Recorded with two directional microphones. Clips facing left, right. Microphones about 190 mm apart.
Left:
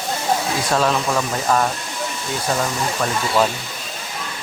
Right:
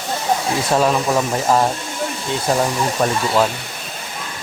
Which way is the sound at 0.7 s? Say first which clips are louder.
Right 3 dB; 15° right (ahead or behind).